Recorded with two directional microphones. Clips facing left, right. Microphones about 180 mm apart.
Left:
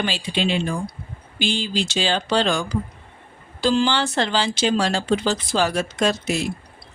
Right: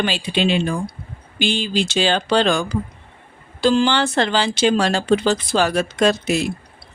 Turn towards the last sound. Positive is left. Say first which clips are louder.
# right 4 dB
turn(degrees=-65)  # may be behind; listen again after turning